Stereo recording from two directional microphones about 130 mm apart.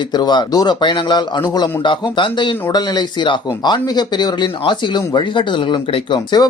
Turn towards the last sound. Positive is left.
turn(degrees=35)  # may be behind; listen again after turning